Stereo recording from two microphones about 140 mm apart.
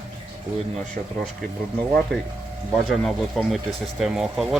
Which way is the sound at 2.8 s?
Centre (ahead or behind).